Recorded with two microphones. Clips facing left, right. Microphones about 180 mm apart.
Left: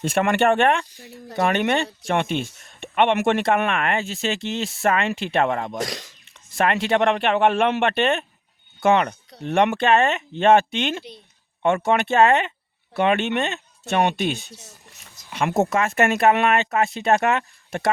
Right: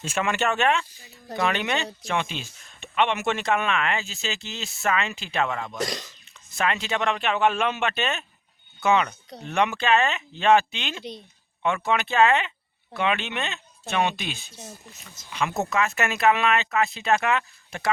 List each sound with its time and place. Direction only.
0.2 s speech: 55° left (ahead or behind)
15.3 s speech: 50° left (ahead or behind)